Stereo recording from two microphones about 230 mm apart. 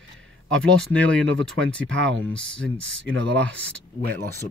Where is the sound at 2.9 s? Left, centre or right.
Right.